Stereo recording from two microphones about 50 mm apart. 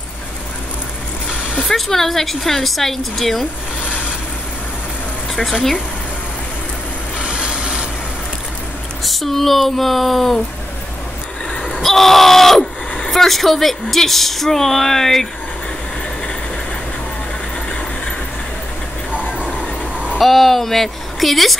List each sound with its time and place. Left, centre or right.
1.7 s a woman's voice: centre
5.3 s speech: centre
7.2 s a sound: centre
9.0 s a woman's voice: centre
11.8 s a woman's voice: centre
20.2 s a woman's voice: centre